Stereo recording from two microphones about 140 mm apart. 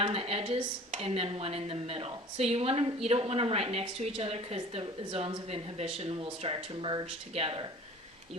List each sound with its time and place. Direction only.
0.0 s speech: 45° right (ahead or behind)